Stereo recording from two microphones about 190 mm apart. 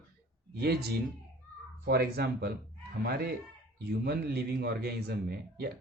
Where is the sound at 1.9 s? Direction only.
55° right (ahead or behind).